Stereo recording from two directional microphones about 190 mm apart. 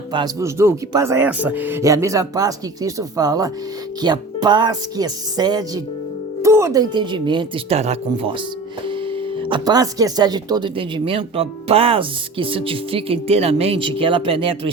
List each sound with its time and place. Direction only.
0.1 s speech: 20° right (ahead or behind)